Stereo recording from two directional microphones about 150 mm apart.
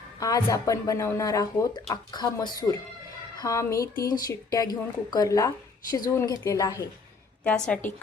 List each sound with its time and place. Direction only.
0.2 s speech: 20° left (ahead or behind)
7.4 s a woman's voice: 5° left (ahead or behind)